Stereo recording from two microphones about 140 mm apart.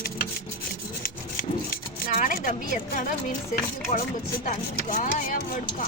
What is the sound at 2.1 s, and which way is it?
Speech, 75° left (ahead or behind).